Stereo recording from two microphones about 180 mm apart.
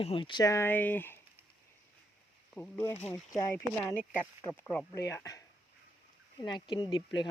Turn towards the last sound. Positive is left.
turn(degrees=25)  # may be behind; listen again after turning